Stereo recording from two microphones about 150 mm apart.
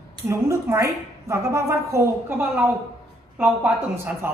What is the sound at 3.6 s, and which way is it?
Speech, 15° right (ahead or behind).